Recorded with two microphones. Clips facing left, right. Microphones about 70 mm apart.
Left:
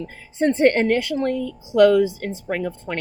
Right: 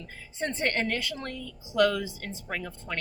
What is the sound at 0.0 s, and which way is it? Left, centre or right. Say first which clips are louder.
Speech: left 13 dB; left.